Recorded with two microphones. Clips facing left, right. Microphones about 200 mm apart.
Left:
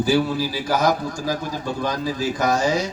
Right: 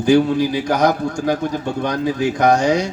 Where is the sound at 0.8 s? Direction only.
60° right (ahead or behind).